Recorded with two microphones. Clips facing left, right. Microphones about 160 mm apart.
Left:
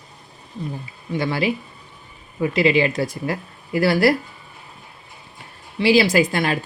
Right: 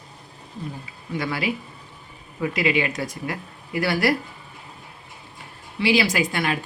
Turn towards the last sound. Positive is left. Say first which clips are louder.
# left 5 dB
turn(degrees=35)  # may be behind; listen again after turning